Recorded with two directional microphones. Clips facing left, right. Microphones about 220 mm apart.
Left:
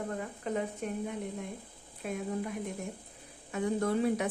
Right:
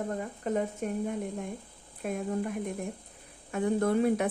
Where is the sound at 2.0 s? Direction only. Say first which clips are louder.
Right 3 dB; 50° right (ahead or behind).